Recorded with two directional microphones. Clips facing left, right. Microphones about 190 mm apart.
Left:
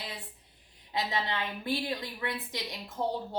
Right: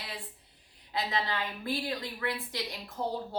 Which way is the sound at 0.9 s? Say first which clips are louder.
Even; 20° left (ahead or behind).